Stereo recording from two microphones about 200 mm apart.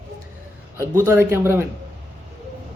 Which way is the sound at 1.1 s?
10° right (ahead or behind).